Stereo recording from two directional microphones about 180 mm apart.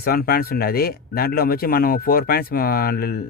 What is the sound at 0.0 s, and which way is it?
Speech, 55° left (ahead or behind).